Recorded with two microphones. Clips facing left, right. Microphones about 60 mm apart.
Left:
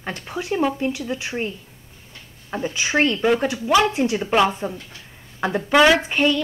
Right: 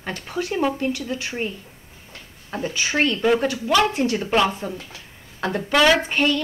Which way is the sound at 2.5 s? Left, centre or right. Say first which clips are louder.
Left 2 dB; centre.